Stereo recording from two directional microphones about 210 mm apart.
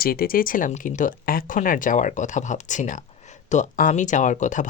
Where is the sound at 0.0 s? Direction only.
45° left (ahead or behind).